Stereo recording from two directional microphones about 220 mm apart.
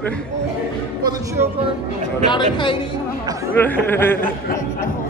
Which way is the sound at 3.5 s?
10° left (ahead or behind).